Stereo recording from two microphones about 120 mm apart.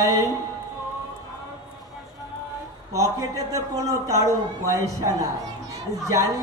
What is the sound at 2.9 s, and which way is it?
A man's voice, 30° right (ahead or behind).